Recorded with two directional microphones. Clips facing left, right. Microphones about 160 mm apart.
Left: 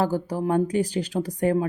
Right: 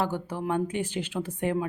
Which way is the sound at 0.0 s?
35° left (ahead or behind).